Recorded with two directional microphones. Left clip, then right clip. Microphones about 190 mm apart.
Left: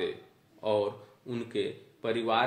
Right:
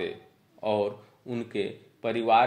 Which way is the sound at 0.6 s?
30° right (ahead or behind).